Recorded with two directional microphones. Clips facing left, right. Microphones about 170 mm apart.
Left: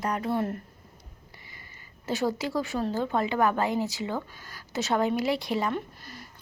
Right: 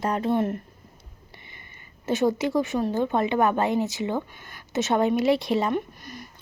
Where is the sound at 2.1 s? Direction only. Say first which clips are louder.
Right 5 dB; 20° right (ahead or behind).